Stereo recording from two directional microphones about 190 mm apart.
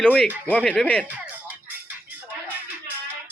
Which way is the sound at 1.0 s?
10° right (ahead or behind).